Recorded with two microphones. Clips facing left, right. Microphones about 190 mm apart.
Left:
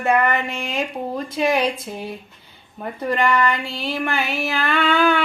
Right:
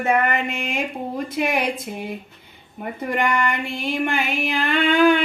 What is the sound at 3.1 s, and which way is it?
Female singing, 20° right (ahead or behind).